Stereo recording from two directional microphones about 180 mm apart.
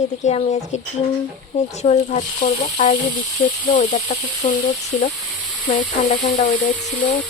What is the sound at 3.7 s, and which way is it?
Snake, 45° left (ahead or behind).